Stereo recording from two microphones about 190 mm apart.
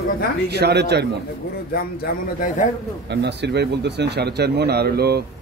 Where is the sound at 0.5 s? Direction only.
60° right (ahead or behind).